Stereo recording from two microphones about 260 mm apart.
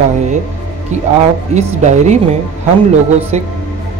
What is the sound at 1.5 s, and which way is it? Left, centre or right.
Music, right.